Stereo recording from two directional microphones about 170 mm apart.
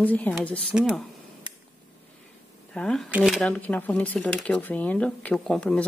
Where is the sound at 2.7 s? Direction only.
5° left (ahead or behind).